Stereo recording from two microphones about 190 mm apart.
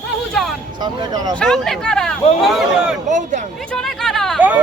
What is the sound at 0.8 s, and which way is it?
Speech, 20° right (ahead or behind).